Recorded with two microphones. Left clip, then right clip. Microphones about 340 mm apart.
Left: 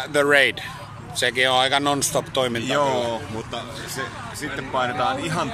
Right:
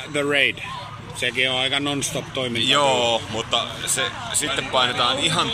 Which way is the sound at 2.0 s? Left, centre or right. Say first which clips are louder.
Left 3 dB; left.